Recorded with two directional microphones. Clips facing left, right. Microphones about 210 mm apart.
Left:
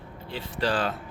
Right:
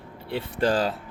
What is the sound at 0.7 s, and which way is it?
Speech, 40° right (ahead or behind).